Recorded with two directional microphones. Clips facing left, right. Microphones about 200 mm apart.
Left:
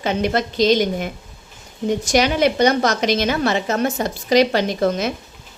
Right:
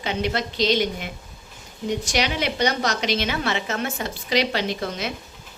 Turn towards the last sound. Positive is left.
turn(degrees=45)  # may be behind; listen again after turning